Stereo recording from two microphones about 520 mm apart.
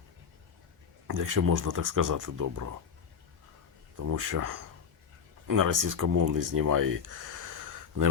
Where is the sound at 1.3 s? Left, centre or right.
Right.